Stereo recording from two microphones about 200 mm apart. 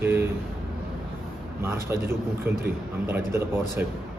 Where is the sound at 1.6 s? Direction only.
10° right (ahead or behind).